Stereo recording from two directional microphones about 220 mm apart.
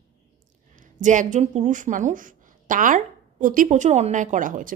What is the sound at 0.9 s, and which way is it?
A woman's voice, 35° right (ahead or behind).